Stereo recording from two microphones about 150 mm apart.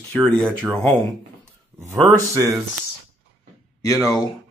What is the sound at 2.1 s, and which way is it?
Speech, 20° right (ahead or behind).